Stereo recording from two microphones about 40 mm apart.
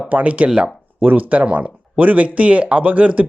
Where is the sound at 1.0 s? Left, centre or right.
Right.